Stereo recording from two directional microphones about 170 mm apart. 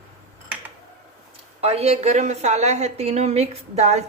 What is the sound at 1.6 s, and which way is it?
Speech, 35° right (ahead or behind).